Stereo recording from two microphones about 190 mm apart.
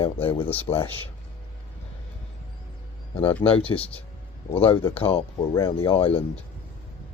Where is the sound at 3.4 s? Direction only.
20° left (ahead or behind).